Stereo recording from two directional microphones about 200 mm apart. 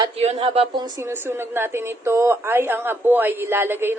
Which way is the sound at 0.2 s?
30° right (ahead or behind).